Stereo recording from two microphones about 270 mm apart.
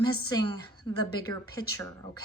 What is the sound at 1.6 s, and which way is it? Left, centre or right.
Speech, centre.